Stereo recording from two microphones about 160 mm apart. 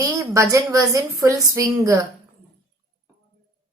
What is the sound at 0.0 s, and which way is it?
A woman's voice, 20° right (ahead or behind).